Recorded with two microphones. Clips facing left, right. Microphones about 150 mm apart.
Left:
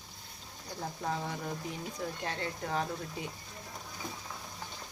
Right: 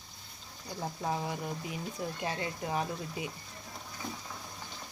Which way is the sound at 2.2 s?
10° right (ahead or behind).